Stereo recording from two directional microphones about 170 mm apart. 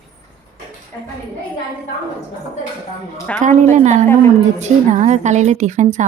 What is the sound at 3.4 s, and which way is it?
A woman's voice, 45° right (ahead or behind).